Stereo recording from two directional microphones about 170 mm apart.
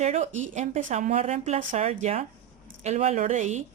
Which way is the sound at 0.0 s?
45° right (ahead or behind).